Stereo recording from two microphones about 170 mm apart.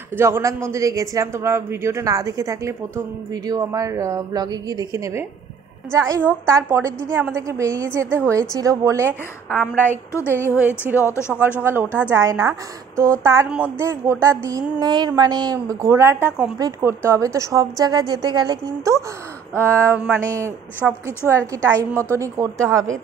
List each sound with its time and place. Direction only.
0.2 s a woman's voice: 15° right (ahead or behind)
9.0 s a woman's voice: 10° left (ahead or behind)
11.6 s a woman's voice: 15° right (ahead or behind)
16.5 s a woman's voice: 20° right (ahead or behind)
20.8 s a woman's voice: 5° right (ahead or behind)
21.3 s speech: 15° right (ahead or behind)